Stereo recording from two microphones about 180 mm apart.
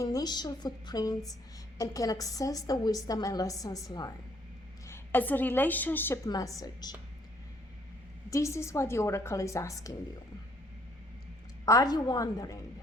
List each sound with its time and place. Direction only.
0.0 s a woman's voice: 20° left (ahead or behind)
4.9 s a woman's voice: 10° left (ahead or behind)
8.3 s a woman's voice: 15° left (ahead or behind)
11.6 s a woman's voice: 20° left (ahead or behind)